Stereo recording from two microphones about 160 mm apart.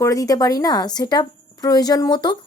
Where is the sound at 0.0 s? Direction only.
20° left (ahead or behind).